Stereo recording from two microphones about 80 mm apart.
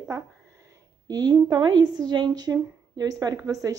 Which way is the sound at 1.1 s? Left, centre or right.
Right.